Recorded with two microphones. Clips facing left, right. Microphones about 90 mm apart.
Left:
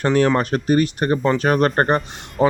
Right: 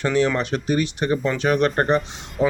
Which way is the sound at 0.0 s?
50° left (ahead or behind).